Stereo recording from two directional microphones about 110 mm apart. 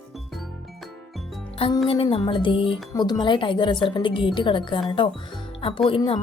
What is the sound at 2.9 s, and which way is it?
Speech, 40° left (ahead or behind).